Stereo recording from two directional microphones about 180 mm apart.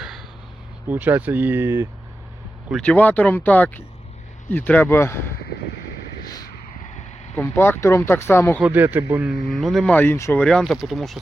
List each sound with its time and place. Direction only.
0.0 s a sound: centre (ahead or behind)
0.9 s speech: 10° right (ahead or behind)
2.6 s speech: 5° left (ahead or behind)
6.2 s vehicle: 20° left (ahead or behind)
7.3 s speech: 10° left (ahead or behind)
8.6 s speech: 10° right (ahead or behind); by 10.4 s 15° left (ahead or behind)
10.4 s speech: centre (ahead or behind)